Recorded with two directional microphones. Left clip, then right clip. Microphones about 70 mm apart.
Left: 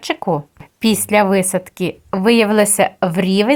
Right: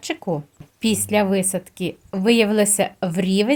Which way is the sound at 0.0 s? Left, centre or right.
Left.